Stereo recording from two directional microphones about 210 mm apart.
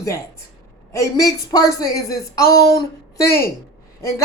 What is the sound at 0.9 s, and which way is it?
Speech, 15° left (ahead or behind).